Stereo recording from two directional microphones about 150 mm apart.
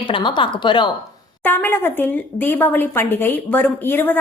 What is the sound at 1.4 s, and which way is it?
Speech, 15° left (ahead or behind).